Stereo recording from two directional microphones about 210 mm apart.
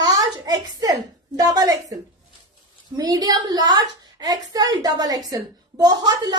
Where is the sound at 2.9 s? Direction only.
20° right (ahead or behind).